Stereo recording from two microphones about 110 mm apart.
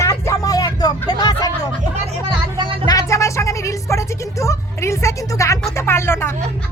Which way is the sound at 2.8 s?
30° left (ahead or behind).